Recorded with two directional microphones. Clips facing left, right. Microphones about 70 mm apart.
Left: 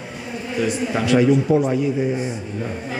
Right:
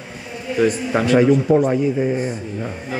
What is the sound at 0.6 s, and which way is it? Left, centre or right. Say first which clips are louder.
A man's voice: right 4 dB; right.